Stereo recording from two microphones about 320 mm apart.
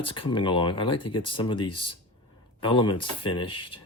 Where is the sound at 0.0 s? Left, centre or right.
Centre.